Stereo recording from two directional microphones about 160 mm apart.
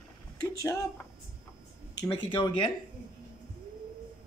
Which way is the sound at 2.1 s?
30° left (ahead or behind).